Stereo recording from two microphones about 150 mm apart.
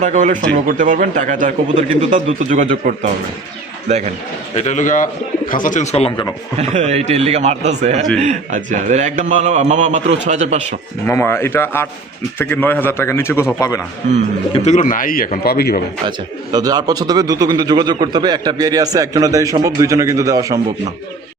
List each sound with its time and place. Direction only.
0.0 s a man's voice: 55° right (ahead or behind)
4.5 s speech: 50° left (ahead or behind)
6.6 s a man's voice: 45° right (ahead or behind)
11.0 s a man's voice: 15° left (ahead or behind)
14.6 s speech: 55° left (ahead or behind); by 15.8 s 90° left
16.0 s speech: 25° right (ahead or behind)